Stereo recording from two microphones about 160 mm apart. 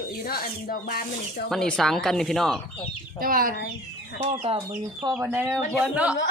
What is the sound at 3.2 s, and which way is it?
Speech, 60° right (ahead or behind).